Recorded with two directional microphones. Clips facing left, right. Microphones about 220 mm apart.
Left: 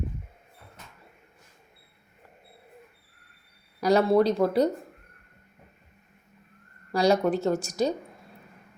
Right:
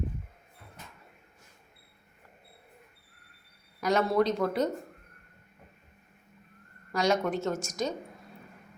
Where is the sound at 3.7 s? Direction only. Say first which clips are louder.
Left 5 dB; 35° left (ahead or behind).